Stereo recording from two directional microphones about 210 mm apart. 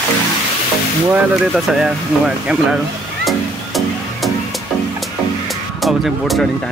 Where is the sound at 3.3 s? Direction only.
Centre (ahead or behind).